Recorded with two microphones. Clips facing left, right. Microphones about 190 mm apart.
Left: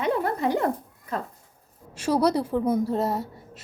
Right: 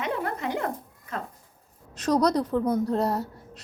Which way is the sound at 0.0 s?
35° left (ahead or behind).